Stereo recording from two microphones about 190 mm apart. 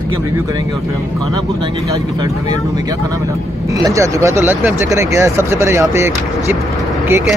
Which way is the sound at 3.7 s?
15° right (ahead or behind).